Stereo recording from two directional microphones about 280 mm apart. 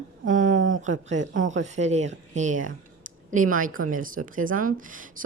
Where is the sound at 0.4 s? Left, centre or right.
Right.